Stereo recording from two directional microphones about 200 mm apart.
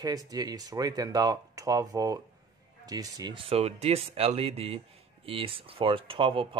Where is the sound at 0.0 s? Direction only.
20° right (ahead or behind).